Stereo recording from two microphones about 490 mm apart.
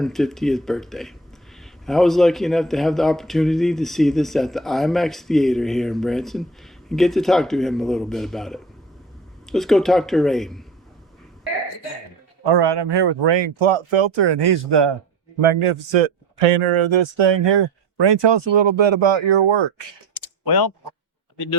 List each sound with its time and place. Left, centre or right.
0.0 s a man's voice: centre
12.5 s speech: right
15.4 s a man's voice: right
20.1 s typing: left